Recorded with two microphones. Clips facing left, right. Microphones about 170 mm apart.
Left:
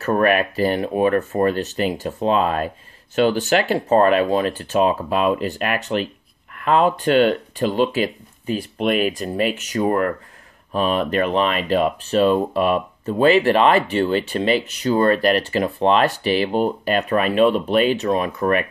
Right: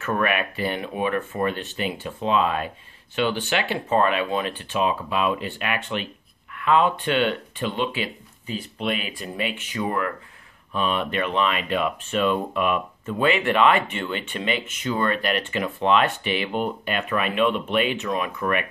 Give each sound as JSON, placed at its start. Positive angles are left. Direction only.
{"t": 0.0, "sound": "speech", "side_deg": 40}